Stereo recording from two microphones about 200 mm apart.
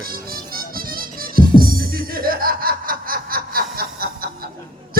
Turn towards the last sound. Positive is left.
turn(degrees=-50)  # may be behind; listen again after turning